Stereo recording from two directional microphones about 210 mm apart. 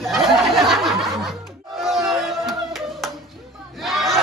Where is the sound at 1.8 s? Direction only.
Centre (ahead or behind).